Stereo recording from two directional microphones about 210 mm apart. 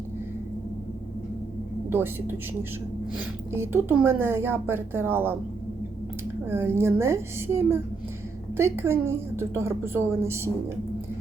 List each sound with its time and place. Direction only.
1.9 s speech: 10° right (ahead or behind)
6.5 s speech: 10° right (ahead or behind)